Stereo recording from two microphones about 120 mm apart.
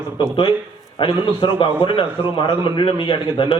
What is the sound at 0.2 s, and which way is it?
A man's voice, 40° left (ahead or behind).